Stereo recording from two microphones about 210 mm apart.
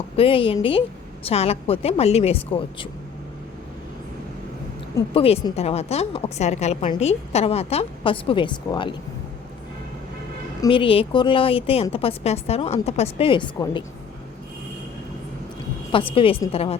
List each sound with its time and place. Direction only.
0.2 s a woman's voice: 25° left (ahead or behind)
5.1 s a woman's voice: 25° left (ahead or behind)
10.6 s a woman's voice: 25° left (ahead or behind)
15.9 s a woman's voice: 25° left (ahead or behind)